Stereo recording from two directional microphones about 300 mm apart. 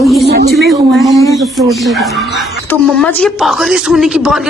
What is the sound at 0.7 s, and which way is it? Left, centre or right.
A woman's voice, centre.